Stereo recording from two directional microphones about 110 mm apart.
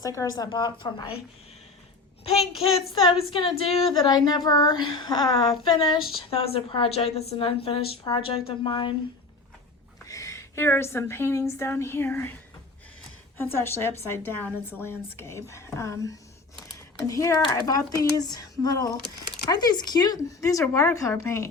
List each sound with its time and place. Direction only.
0.0 s speech: 30° left (ahead or behind)
2.4 s a child's voice: centre (ahead or behind)
2.9 s a woman's voice: 55° left (ahead or behind)
4.1 s a sound: 40° left (ahead or behind)
10.1 s a woman's voice: 30° left (ahead or behind)
13.3 s a woman's voice: 20° left (ahead or behind)